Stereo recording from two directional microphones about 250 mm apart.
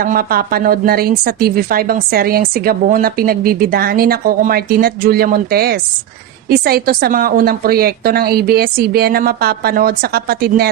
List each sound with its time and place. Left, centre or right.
0.0 s a woman's voice: right